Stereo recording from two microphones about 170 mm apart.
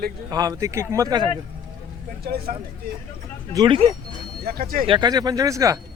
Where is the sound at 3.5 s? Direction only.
25° right (ahead or behind).